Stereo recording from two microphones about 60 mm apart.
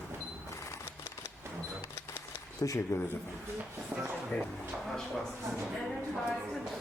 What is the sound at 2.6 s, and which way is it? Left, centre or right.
Speech, left.